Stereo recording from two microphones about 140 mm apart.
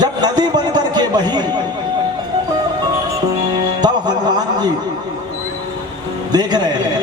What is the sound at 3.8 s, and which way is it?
Speech, 30° right (ahead or behind).